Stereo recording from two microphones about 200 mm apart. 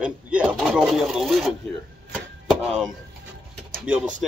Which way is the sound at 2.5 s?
5° right (ahead or behind).